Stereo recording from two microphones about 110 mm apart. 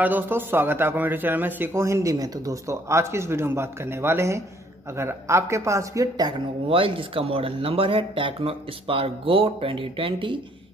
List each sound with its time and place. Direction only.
0.0 s a man's voice: 15° right (ahead or behind); by 6.3 s 35° right (ahead or behind)
6.7 s speech: 55° right (ahead or behind)